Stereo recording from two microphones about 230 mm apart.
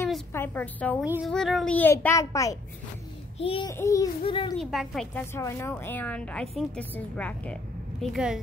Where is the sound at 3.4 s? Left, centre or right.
Left.